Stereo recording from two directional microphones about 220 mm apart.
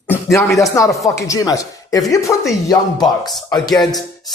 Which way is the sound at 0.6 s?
15° left (ahead or behind).